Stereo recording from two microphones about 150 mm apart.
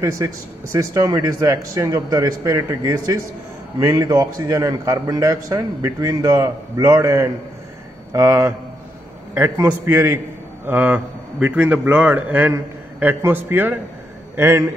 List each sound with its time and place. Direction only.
0.0 s a man's voice: 20° right (ahead or behind)
9.6 s a man's voice: 20° right (ahead or behind)